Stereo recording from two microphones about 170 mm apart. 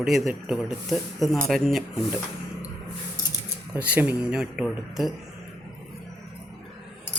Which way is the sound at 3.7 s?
10° right (ahead or behind).